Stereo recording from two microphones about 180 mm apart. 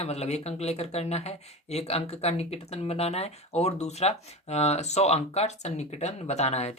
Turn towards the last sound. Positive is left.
turn(degrees=35)  # may be behind; listen again after turning